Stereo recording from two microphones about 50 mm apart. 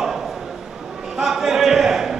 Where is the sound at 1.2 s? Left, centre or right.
Centre.